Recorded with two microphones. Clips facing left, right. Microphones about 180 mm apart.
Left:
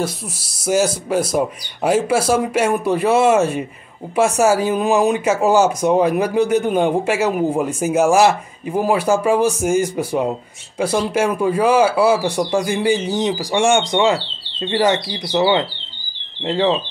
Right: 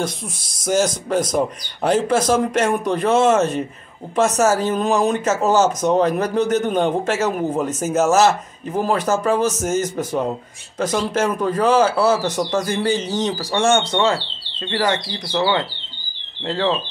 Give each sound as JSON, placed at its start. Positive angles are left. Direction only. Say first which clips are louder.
{"t": 0.7, "sound": "speech", "louder": "left 1 dB", "side_deg": 5}